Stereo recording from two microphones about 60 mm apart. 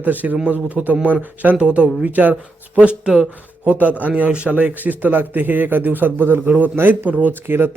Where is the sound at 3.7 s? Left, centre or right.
Right.